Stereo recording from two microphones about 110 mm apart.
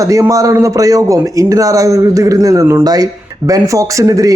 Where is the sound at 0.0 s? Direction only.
30° right (ahead or behind).